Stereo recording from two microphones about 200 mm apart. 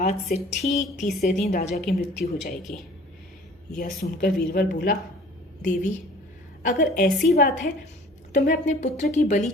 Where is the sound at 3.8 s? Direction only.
45° left (ahead or behind).